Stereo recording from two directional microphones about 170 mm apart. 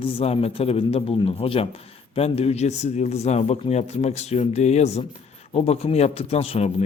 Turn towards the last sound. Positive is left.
turn(degrees=35)  # may be behind; listen again after turning